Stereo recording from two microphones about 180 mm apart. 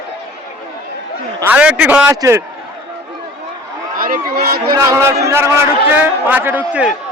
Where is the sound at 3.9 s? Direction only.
50° right (ahead or behind).